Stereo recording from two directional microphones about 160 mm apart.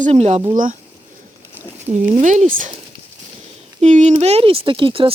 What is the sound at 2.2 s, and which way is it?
Speech, 50° right (ahead or behind).